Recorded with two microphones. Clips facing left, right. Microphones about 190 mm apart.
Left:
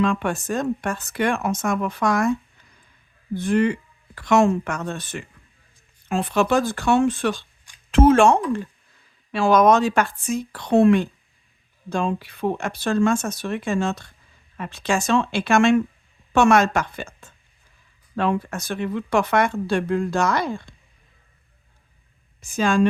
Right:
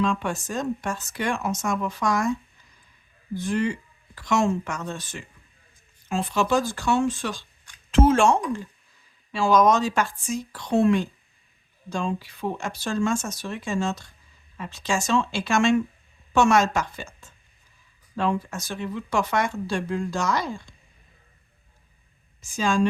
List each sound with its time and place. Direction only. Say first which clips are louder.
0.0 s speech: left 3 dB; 60° left (ahead or behind)
3.3 s speech: left 5 dB; 60° left (ahead or behind)
22.4 s speech: left 4 dB; 60° left (ahead or behind)